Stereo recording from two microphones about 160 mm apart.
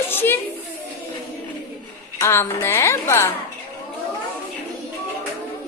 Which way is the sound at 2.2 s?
15° left (ahead or behind).